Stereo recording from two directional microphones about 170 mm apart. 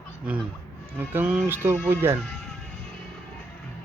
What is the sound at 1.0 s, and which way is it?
Speech, 10° right (ahead or behind).